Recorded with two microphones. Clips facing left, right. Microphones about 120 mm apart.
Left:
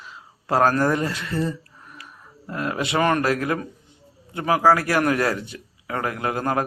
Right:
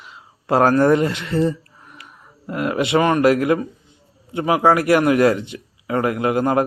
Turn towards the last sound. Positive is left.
turn(degrees=-20)  # may be behind; listen again after turning